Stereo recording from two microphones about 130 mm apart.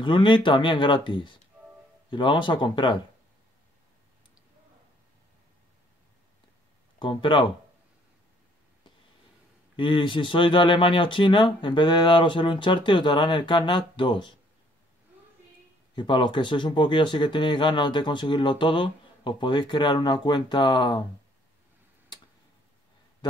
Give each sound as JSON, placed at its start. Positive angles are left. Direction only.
{"t": 0.0, "sound": "speech", "side_deg": 40}
{"t": 7.0, "sound": "speech", "side_deg": 40}
{"t": 9.8, "sound": "speech", "side_deg": 40}
{"t": 15.9, "sound": "speech", "side_deg": 35}